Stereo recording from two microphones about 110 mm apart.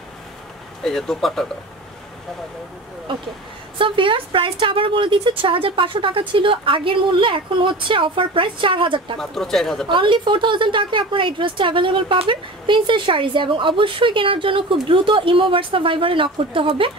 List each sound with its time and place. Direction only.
0.8 s speech: 5° left (ahead or behind)
3.1 s speech: 50° right (ahead or behind)
9.2 s speech: 5° left (ahead or behind)
9.8 s speech: 50° right (ahead or behind)